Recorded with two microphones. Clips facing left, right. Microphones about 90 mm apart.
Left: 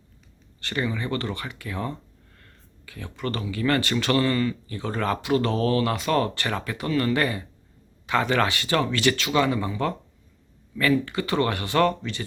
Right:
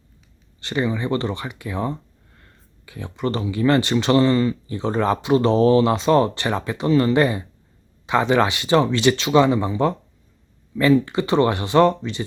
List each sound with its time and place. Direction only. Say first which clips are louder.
0.6 s speech: right 5 dB; 20° right (ahead or behind)